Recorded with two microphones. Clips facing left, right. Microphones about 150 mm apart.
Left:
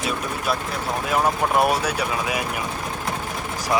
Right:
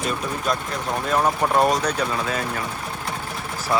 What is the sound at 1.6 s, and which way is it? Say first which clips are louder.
Speech: right 2 dB; 10° left (ahead or behind).